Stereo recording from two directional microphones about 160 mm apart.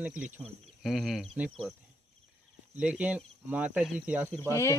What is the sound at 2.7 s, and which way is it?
Speech, 10° right (ahead or behind).